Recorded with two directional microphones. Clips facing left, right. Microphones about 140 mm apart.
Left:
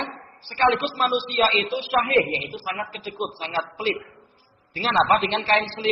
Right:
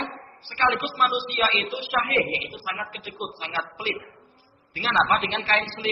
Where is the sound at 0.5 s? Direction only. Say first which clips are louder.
Left 4 dB; 30° left (ahead or behind).